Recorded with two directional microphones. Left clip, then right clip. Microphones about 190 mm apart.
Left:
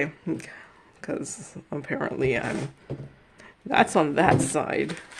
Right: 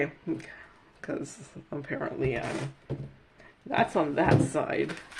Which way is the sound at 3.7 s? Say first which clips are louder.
Left 5 dB; 35° left (ahead or behind).